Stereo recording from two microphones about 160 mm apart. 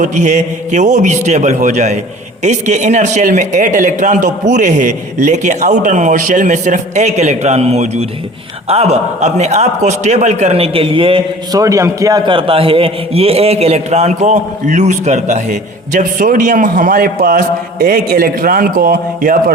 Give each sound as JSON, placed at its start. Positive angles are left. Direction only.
{"t": 0.0, "sound": "a man's voice", "side_deg": -50}
{"t": 11.6, "sound": "a man's voice", "side_deg": -20}